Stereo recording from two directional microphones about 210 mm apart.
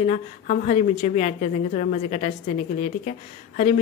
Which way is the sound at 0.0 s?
35° left (ahead or behind).